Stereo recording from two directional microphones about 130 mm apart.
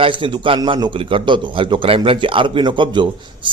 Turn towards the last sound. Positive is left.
turn(degrees=-35)  # may be behind; listen again after turning